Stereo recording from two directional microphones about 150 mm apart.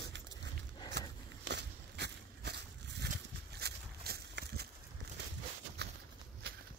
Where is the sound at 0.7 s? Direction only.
30° left (ahead or behind).